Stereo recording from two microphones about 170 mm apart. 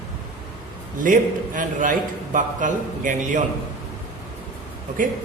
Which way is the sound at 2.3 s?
50° right (ahead or behind).